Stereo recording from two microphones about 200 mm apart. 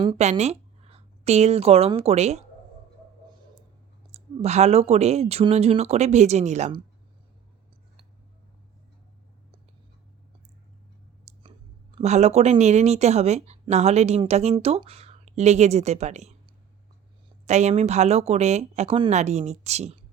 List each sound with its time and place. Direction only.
0.2 s speech: 35° right (ahead or behind)
4.1 s speech: 35° right (ahead or behind)
11.3 s a sound: 35° right (ahead or behind)
11.9 s speech: 35° right (ahead or behind)
17.4 s speech: 35° right (ahead or behind)